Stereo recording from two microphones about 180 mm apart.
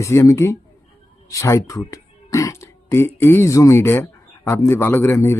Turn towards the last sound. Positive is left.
turn(degrees=15)  # may be behind; listen again after turning